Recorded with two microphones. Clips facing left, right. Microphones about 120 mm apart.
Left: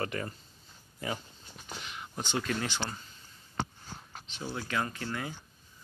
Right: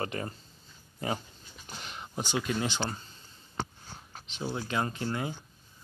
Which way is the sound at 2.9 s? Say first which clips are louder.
Right 3 dB; 35° right (ahead or behind).